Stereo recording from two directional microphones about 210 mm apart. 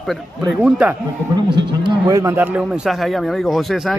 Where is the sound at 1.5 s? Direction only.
20° right (ahead or behind).